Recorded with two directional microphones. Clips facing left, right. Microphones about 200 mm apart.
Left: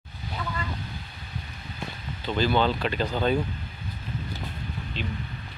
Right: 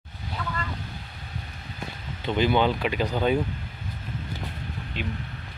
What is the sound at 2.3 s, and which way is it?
Speech, 15° right (ahead or behind).